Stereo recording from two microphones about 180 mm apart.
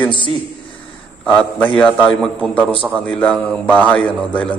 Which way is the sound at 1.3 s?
5° left (ahead or behind).